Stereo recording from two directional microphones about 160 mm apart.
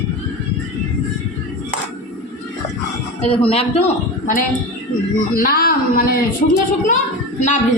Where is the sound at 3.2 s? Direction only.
40° left (ahead or behind).